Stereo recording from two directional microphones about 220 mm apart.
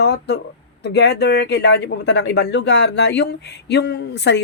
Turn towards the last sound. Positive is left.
turn(degrees=50)  # may be behind; listen again after turning